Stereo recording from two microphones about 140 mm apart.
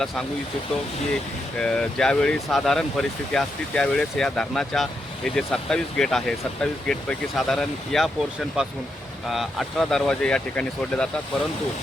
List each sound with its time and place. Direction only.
1.5 s speech: 5° left (ahead or behind)